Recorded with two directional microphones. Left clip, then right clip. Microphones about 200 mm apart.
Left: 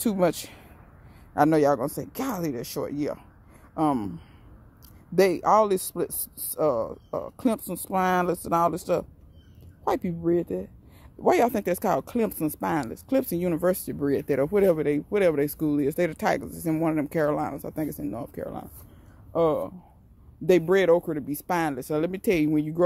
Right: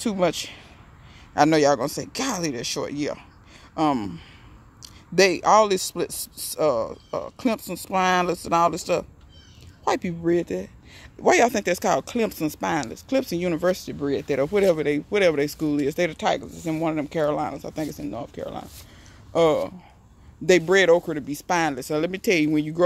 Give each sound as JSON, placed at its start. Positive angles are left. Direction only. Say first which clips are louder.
{"t": 0.0, "sound": "speech", "louder": "right 1 dB", "side_deg": 20}
{"t": 1.3, "sound": "speech", "louder": "right 3 dB", "side_deg": 10}
{"t": 5.1, "sound": "speech", "louder": "right 3 dB", "side_deg": 5}
{"t": 19.3, "sound": "speech", "louder": "right 4 dB", "side_deg": -5}